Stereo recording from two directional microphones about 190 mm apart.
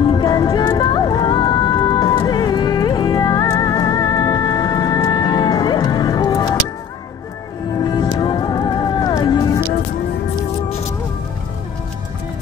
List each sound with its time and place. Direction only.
0.0 s music: 20° left (ahead or behind)
7.8 s music: 20° left (ahead or behind)